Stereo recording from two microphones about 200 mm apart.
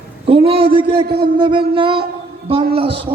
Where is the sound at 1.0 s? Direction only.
50° right (ahead or behind).